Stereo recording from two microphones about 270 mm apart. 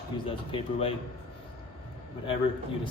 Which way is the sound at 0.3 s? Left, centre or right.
Left.